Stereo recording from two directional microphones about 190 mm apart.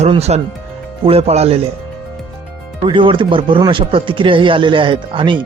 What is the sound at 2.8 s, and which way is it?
Speech, 25° right (ahead or behind).